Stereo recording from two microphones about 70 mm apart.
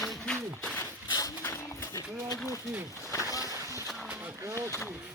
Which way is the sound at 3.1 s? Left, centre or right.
Left.